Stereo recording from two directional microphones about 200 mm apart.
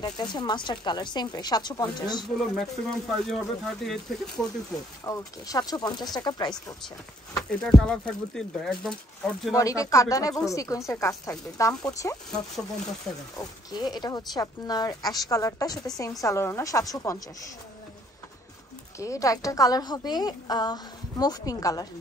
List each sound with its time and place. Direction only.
0.0 s a woman's voice: 20° left (ahead or behind)
2.3 s speech: centre (ahead or behind)
5.0 s a woman's voice: 15° left (ahead or behind)
7.3 s speech: centre (ahead or behind)
9.6 s a woman's voice: 15° left (ahead or behind)
13.1 s speech: 5° left (ahead or behind)
13.4 s a woman's voice: 20° left (ahead or behind)
18.9 s a woman's voice: 15° left (ahead or behind)